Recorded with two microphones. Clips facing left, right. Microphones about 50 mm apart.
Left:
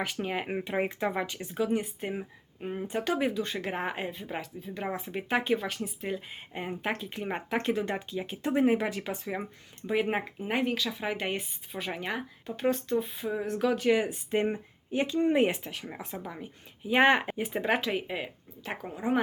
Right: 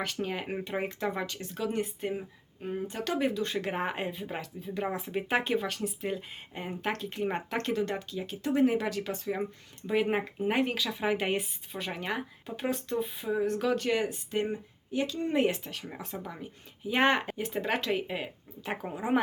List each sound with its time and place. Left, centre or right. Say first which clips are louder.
0.0 s speech: left 1 dB; centre
14.3 s speech: left 3 dB; left
15.7 s speech: left 1 dB; centre